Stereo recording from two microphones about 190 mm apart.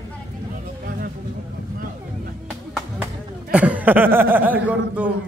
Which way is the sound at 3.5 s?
5° right (ahead or behind).